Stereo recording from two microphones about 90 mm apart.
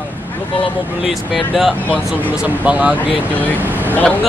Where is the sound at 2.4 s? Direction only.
15° right (ahead or behind).